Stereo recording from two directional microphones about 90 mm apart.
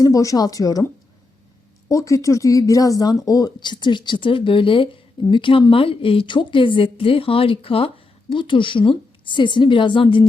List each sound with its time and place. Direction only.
0.0 s speech: 40° left (ahead or behind)
1.9 s a woman's voice: 35° left (ahead or behind); by 5.6 s 70° left (ahead or behind)
5.7 s a woman's voice: 85° left; by 10.2 s 70° left (ahead or behind)